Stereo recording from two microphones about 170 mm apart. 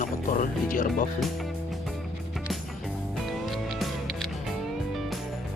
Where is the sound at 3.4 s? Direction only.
Centre (ahead or behind).